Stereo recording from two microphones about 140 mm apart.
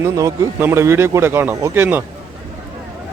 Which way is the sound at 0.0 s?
25° right (ahead or behind).